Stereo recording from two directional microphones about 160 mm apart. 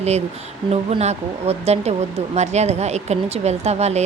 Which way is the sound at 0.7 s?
40° right (ahead or behind).